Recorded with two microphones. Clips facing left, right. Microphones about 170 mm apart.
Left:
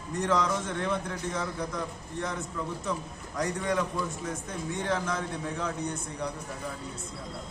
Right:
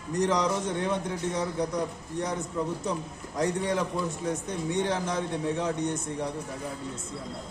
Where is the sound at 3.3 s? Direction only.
25° right (ahead or behind).